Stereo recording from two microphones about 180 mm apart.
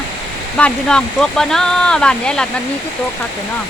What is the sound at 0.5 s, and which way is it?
Speech, 5° left (ahead or behind).